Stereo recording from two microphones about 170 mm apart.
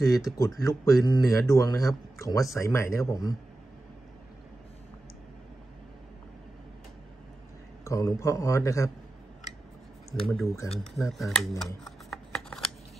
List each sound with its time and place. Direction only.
0.0 s a man's voice: 20° left (ahead or behind)
7.8 s a man's voice: 20° left (ahead or behind)
10.4 s a man's voice: 20° left (ahead or behind)
11.1 s speech: centre (ahead or behind)
11.6 s shuffling cards: centre (ahead or behind)